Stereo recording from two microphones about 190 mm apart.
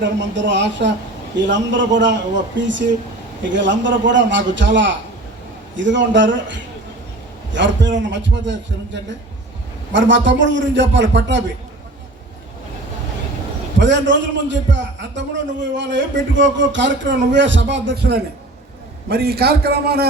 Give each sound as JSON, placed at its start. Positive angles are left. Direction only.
{"t": 0.0, "sound": "speech", "side_deg": -70}
{"t": 13.7, "sound": "a man's voice", "side_deg": -70}